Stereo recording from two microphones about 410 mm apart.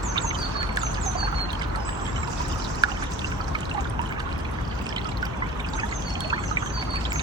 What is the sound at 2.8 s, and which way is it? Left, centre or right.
Pour, centre.